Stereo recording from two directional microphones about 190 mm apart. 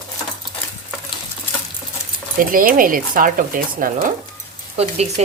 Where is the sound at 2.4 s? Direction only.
45° right (ahead or behind).